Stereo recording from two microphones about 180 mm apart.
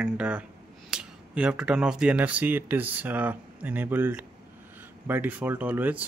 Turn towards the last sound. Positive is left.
turn(degrees=-10)  # may be behind; listen again after turning